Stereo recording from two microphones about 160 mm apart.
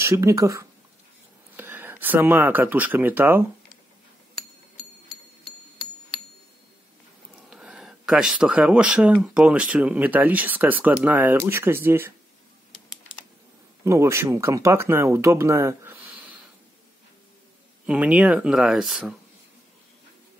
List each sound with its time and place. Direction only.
0.0 s speech: 20° right (ahead or behind)
7.3 s speech: 5° right (ahead or behind)
13.8 s speech: 15° right (ahead or behind)
17.8 s speech: 10° right (ahead or behind)